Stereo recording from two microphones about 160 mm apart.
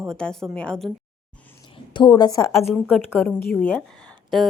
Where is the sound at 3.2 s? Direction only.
5° left (ahead or behind).